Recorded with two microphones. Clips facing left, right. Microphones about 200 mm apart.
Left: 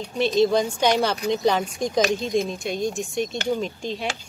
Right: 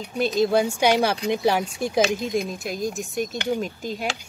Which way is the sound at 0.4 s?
5° right (ahead or behind).